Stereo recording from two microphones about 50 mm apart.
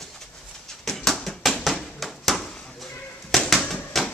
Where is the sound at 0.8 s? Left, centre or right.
Centre.